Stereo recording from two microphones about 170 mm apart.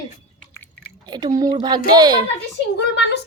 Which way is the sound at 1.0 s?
25° right (ahead or behind).